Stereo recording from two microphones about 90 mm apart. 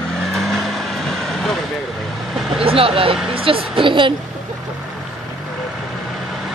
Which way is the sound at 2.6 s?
90° right.